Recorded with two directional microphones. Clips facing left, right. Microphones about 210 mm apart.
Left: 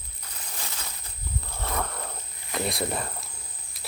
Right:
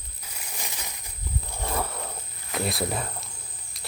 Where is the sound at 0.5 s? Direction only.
15° right (ahead or behind).